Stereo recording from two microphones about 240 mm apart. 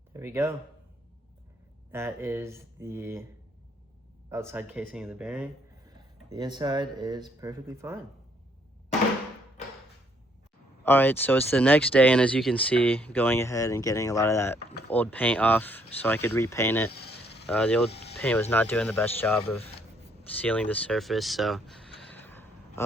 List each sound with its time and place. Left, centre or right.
0.1 s speech: centre
1.9 s speech: centre
4.3 s speech: centre
6.3 s speech: centre
10.8 s speech: centre
16.9 s a sound: left
17.5 s speech: centre
22.1 s a sound: centre